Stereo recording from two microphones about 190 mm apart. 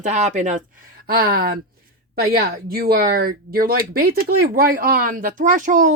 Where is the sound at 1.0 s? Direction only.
55° right (ahead or behind).